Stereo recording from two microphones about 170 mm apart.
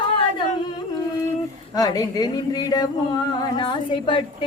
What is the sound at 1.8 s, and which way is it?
Speech, 20° left (ahead or behind).